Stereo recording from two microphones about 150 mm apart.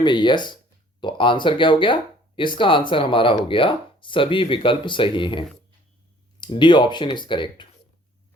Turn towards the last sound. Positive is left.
turn(degrees=35)  # may be behind; listen again after turning